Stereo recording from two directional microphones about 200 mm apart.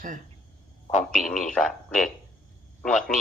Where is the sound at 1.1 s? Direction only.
5° left (ahead or behind).